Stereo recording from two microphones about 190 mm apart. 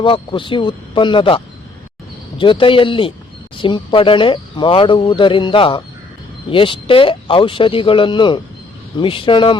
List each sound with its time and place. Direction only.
0.0 s speech: 25° left (ahead or behind)
2.4 s speech: 25° left (ahead or behind)